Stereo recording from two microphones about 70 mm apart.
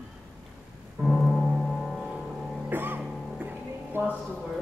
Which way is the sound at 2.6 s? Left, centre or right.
Right.